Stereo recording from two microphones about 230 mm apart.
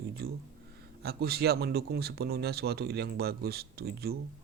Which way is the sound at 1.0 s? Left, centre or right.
Right.